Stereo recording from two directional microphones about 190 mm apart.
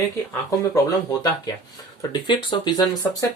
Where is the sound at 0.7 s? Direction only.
20° left (ahead or behind).